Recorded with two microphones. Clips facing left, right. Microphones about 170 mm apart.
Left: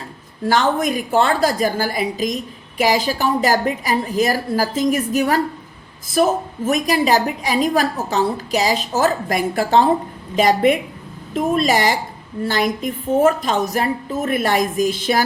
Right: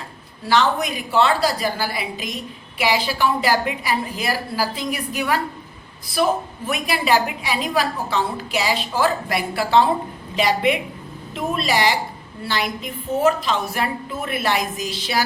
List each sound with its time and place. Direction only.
0.4 s a woman's voice: 45° left (ahead or behind)